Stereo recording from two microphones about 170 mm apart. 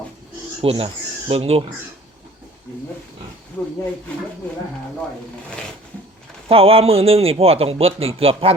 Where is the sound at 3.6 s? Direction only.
10° left (ahead or behind).